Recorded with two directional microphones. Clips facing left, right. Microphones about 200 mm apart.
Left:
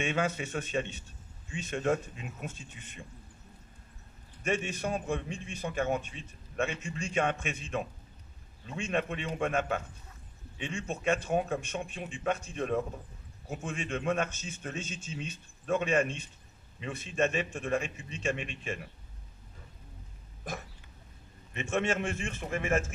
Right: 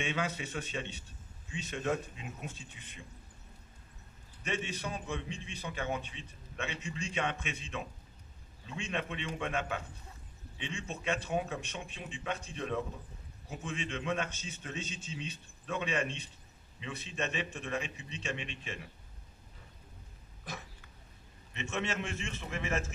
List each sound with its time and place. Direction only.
0.0 s a man's voice: 50° left (ahead or behind)
4.4 s a man's voice: 50° left (ahead or behind)
21.5 s a man's voice: 50° left (ahead or behind)